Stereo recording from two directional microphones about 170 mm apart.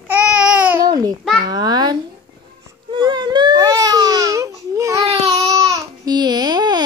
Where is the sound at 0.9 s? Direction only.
20° right (ahead or behind).